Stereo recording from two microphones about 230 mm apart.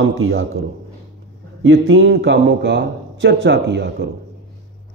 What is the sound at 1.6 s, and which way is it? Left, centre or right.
A man's voice, right.